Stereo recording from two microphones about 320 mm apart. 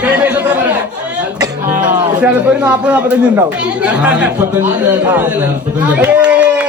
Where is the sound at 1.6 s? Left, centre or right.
Right.